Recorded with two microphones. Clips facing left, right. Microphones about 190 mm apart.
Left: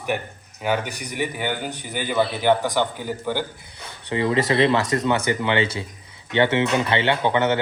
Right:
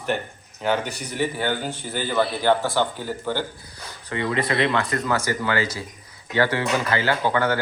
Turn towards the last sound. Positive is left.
turn(degrees=25)  # may be behind; listen again after turning